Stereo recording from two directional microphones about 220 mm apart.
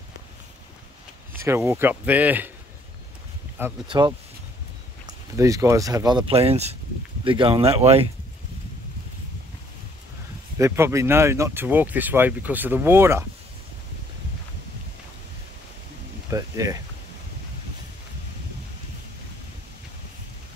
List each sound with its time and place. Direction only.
1.4 s speech: 10° right (ahead or behind)
3.5 s speech: 10° right (ahead or behind)
5.3 s speech: 15° right (ahead or behind)
10.6 s speech: 15° right (ahead or behind)
16.3 s speech: 15° right (ahead or behind)